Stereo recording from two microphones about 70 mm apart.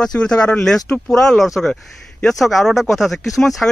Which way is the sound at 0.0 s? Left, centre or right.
Centre.